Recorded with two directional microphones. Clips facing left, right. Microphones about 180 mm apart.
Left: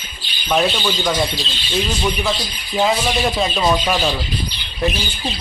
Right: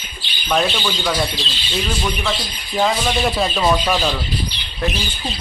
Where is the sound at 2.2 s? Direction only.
5° left (ahead or behind).